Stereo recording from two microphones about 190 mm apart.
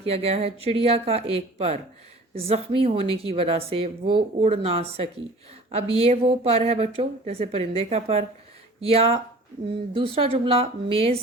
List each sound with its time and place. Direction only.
0.0 s a woman's voice: 30° right (ahead or behind)
10.2 s a woman's voice: 30° right (ahead or behind)